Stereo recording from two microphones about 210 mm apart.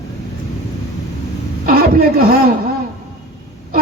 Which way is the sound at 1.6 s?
45° right (ahead or behind).